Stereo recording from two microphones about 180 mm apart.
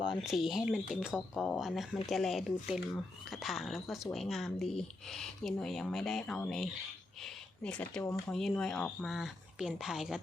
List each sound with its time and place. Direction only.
0.2 s speech: centre (ahead or behind)